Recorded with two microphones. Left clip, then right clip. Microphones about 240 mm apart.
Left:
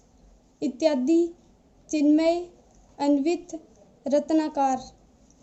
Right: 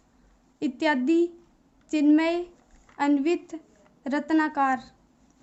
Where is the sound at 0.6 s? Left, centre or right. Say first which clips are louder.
Left 1 dB; centre.